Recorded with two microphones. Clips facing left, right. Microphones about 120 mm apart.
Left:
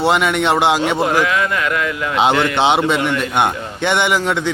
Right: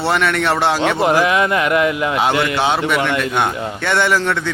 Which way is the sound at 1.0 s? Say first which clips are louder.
Right 2 dB; 20° right (ahead or behind).